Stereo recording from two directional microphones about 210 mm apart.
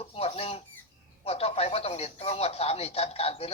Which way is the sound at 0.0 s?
30° left (ahead or behind).